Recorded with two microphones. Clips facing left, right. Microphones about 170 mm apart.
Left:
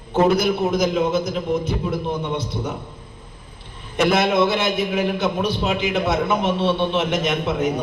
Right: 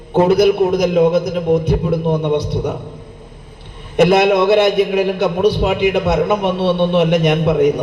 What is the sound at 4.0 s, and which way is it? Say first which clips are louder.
A man's voice: right 6 dB; 65° right (ahead or behind).